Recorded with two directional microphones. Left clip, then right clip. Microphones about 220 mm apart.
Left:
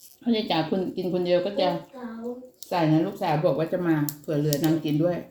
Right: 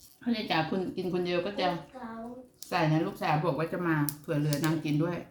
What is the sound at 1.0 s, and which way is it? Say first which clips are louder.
Speech: left 5 dB; 15° right (ahead or behind).